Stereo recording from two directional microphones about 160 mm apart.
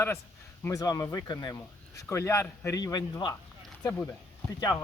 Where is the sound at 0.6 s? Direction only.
20° left (ahead or behind).